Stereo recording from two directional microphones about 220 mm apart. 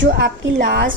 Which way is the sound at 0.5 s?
45° right (ahead or behind).